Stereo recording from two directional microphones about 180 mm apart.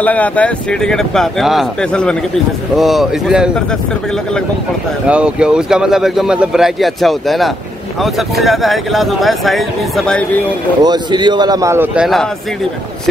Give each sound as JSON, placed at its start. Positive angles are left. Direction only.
{"t": 0.0, "sound": "speech", "side_deg": 10}
{"t": 5.0, "sound": "speech", "side_deg": -5}
{"t": 10.8, "sound": "a man's voice", "side_deg": -25}